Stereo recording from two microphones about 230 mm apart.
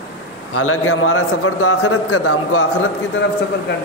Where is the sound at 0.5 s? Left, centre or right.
Left.